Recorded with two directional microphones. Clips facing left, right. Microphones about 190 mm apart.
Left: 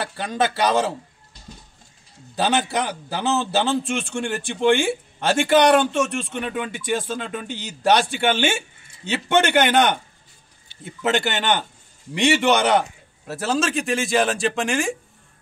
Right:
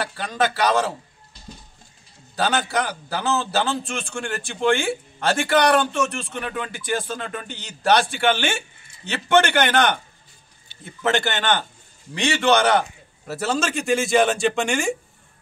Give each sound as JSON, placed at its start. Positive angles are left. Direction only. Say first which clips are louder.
{"t": 0.2, "sound": "a man's voice", "louder": "left 1 dB", "side_deg": 20}
{"t": 2.3, "sound": "a man's voice", "louder": "left 1 dB", "side_deg": 20}
{"t": 10.9, "sound": "speech", "louder": "even", "side_deg": 20}
{"t": 13.3, "sound": "speech", "louder": "left 1 dB", "side_deg": 0}